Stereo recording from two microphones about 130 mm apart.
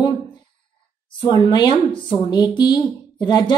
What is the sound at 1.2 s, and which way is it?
Speech, 30° left (ahead or behind).